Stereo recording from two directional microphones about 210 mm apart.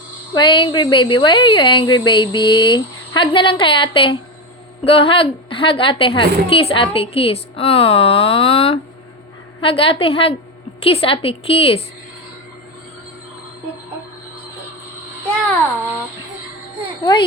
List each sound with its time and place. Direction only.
0.3 s a woman's voice: 20° left (ahead or behind)
17.0 s a woman's voice: 20° left (ahead or behind)